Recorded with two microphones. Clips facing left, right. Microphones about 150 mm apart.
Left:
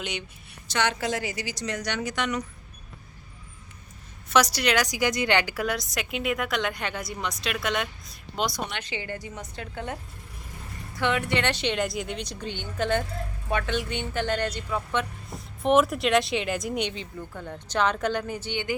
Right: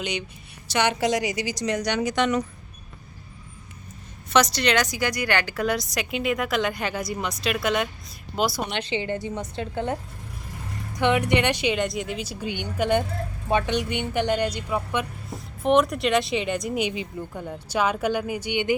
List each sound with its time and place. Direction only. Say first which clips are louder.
0.0 s a woman's voice: right 4 dB; centre (ahead or behind)
0.7 s speech: right 4 dB; 15° right (ahead or behind)
4.3 s a woman's voice: right 2 dB; 10° left (ahead or behind)
5.6 s a woman's voice: right 4 dB; centre (ahead or behind)
8.7 s a woman's voice: right 7 dB; 25° right (ahead or behind)
10.9 s speech: right 5 dB; 15° right (ahead or behind)
15.3 s speech: right 2 dB; centre (ahead or behind); by 18.7 s 15° right (ahead or behind)